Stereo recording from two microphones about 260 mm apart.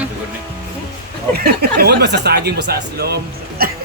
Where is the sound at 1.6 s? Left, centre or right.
Right.